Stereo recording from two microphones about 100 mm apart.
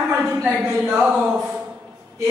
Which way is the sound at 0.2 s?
5° right (ahead or behind).